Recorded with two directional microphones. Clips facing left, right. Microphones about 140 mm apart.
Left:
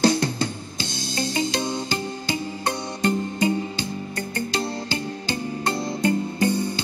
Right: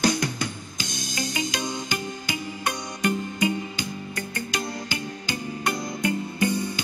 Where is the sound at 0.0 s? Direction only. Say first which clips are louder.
Left 4 dB; 30° left (ahead or behind).